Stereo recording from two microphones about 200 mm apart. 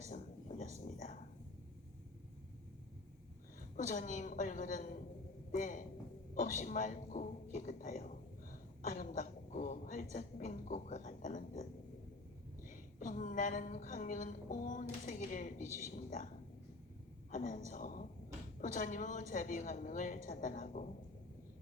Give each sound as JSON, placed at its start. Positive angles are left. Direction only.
{"t": 0.1, "sound": "a sound", "side_deg": 40}
{"t": 3.8, "sound": "a woman's voice", "side_deg": 40}
{"t": 12.6, "sound": "a woman's voice", "side_deg": 40}
{"t": 17.3, "sound": "a woman's voice", "side_deg": 40}